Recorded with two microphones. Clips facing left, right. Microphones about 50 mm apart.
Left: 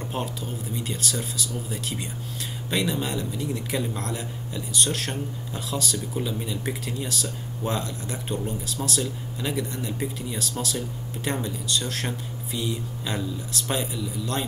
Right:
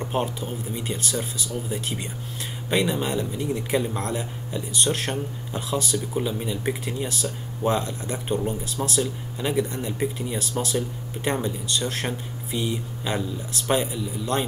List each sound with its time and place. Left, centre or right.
0.0 s speech: right
2.7 s a man's voice: centre